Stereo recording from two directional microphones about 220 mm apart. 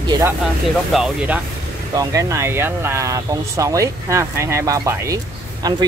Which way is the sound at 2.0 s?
15° right (ahead or behind).